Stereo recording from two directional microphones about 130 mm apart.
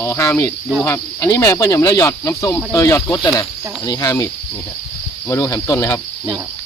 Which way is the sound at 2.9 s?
15° left (ahead or behind).